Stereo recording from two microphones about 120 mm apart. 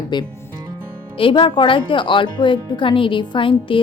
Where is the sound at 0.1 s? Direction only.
40° left (ahead or behind).